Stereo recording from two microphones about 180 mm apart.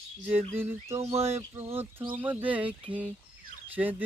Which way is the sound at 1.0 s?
35° right (ahead or behind).